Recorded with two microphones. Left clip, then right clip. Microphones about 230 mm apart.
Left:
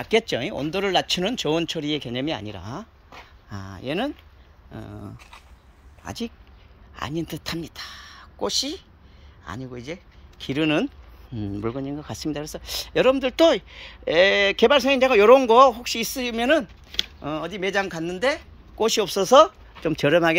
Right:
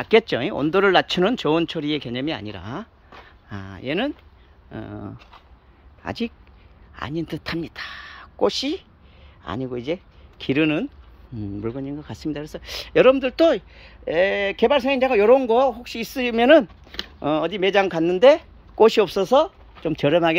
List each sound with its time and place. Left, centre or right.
0.0 s speech: centre
11.3 s speech: centre